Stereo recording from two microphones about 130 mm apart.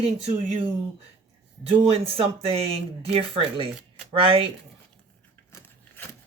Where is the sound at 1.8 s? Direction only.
50° right (ahead or behind).